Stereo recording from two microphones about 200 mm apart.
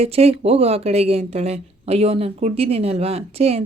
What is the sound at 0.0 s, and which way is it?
A woman's voice, 30° right (ahead or behind).